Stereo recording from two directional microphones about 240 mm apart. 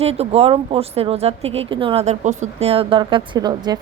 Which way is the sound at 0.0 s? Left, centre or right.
Right.